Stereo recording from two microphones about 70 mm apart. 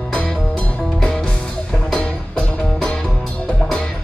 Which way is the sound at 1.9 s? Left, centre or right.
Centre.